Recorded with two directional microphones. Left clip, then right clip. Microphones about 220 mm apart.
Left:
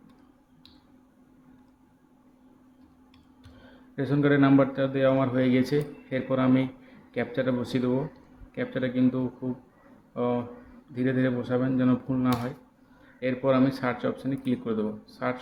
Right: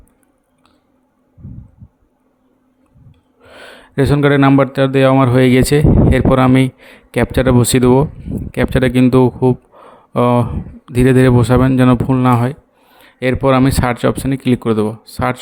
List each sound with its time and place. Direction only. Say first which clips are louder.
3.9 s speech: right 12 dB; 50° right (ahead or behind)